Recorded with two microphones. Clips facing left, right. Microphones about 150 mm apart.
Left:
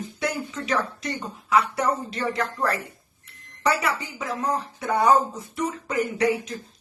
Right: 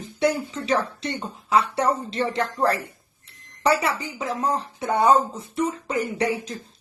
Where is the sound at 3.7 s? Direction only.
30° right (ahead or behind).